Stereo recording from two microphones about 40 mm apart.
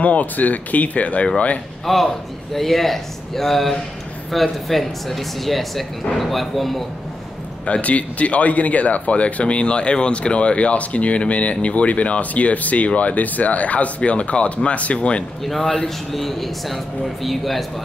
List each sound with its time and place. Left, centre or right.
0.0 s speech: left
1.9 s a man's voice: centre
7.6 s speech: left
15.4 s a man's voice: centre